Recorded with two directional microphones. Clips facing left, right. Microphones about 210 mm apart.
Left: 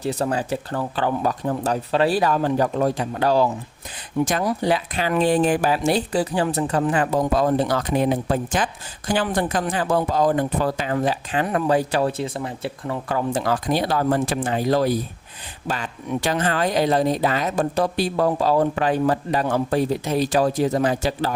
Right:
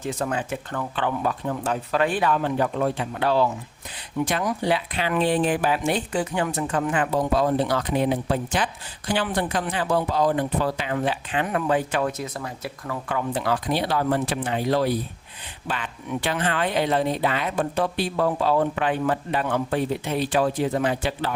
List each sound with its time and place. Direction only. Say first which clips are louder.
0.0 s speech: left 4 dB; 35° left (ahead or behind)